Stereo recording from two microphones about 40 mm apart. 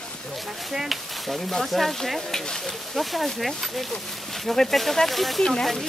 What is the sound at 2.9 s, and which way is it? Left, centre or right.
Speech, centre.